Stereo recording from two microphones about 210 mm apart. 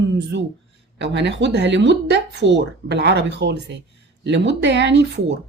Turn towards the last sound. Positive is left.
turn(degrees=-55)  # may be behind; listen again after turning